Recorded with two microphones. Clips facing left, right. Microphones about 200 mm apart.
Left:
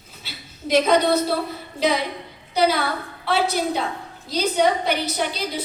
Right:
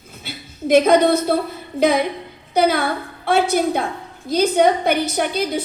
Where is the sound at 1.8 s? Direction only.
50° right (ahead or behind).